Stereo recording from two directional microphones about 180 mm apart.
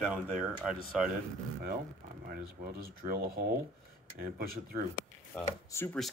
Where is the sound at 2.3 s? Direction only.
55° right (ahead or behind).